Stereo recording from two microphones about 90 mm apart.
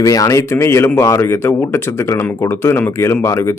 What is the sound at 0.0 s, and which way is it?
Speech, 40° left (ahead or behind).